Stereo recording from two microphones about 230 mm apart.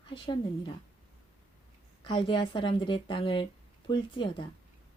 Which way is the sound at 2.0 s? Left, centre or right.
Left.